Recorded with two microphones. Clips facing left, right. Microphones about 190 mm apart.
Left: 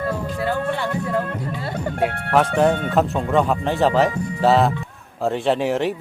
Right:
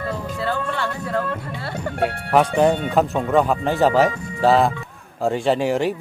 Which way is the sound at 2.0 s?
55° left (ahead or behind).